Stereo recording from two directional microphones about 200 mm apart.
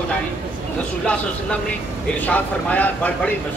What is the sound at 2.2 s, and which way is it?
Speech, 10° left (ahead or behind).